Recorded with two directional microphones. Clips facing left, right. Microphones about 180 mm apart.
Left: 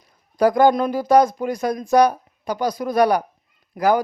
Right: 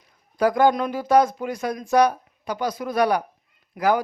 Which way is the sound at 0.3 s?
40° left (ahead or behind).